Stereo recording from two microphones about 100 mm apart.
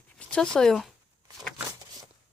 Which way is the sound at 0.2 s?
10° left (ahead or behind).